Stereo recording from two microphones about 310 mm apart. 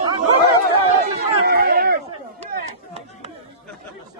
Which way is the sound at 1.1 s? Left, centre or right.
Right.